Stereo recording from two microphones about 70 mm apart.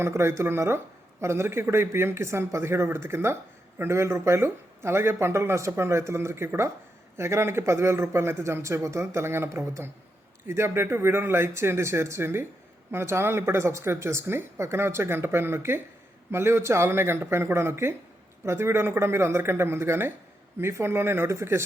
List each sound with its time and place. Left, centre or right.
0.0 s speech: right